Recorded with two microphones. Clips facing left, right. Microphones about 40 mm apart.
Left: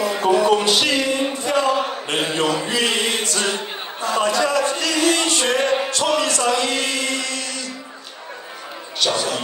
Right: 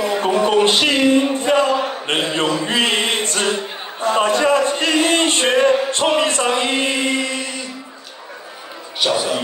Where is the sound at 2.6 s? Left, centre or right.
Right.